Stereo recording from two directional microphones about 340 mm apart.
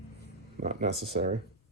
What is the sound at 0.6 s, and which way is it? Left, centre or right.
Speech, centre.